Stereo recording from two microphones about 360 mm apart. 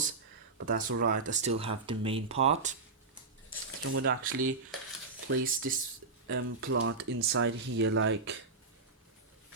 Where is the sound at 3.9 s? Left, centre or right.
Right.